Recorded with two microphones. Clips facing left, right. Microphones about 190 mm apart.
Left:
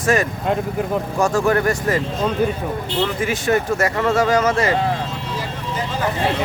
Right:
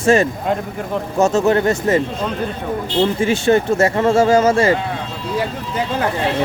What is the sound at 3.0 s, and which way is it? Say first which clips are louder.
Speech: right 6 dB; 30° right (ahead or behind).